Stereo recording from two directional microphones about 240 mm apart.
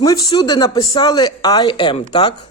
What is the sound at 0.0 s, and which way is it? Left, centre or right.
Speech, centre.